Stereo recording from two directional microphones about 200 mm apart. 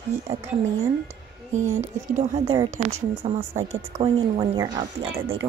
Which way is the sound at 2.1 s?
35° right (ahead or behind).